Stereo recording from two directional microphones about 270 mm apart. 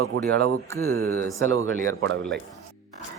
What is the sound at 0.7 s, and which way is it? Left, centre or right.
Speech, centre.